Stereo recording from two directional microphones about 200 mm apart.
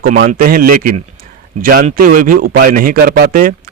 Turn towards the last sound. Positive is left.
turn(degrees=-45)  # may be behind; listen again after turning